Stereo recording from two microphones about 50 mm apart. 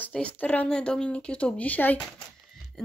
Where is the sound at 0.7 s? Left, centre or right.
Centre; by 2.0 s left.